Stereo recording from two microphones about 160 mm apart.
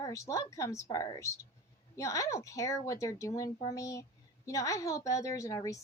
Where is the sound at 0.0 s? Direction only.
20° left (ahead or behind).